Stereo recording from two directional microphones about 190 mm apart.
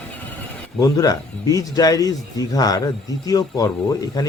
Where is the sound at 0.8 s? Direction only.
20° left (ahead or behind).